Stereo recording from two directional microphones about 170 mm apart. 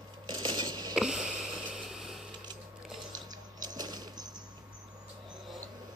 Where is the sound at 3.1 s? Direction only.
25° right (ahead or behind).